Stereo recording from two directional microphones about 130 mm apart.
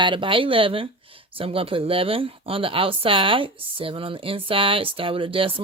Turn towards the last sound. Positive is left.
turn(degrees=-45)  # may be behind; listen again after turning